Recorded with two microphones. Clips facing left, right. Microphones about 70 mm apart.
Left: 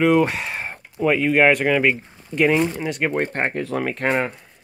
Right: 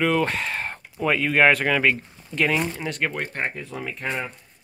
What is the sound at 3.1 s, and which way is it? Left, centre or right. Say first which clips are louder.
Speech: left 6 dB; left.